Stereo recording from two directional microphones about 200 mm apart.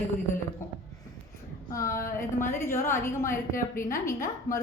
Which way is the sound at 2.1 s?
10° left (ahead or behind).